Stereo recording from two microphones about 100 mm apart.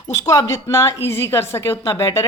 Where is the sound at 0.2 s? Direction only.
30° left (ahead or behind).